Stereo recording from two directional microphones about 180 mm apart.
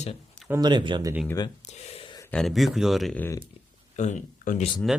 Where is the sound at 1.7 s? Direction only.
35° left (ahead or behind).